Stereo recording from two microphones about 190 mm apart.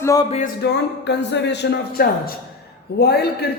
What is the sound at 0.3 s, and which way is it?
Speech, 35° left (ahead or behind).